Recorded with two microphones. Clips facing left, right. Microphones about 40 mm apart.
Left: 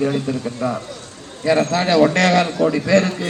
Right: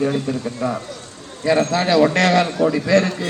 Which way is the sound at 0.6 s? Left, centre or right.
Centre.